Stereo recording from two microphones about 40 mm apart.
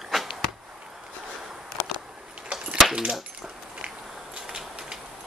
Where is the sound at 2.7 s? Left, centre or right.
Centre.